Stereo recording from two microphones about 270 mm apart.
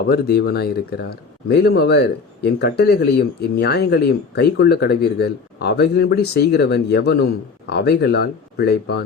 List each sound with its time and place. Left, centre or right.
0.1 s speech: left